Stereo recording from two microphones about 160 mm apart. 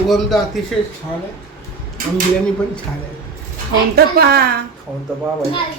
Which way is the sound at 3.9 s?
80° right.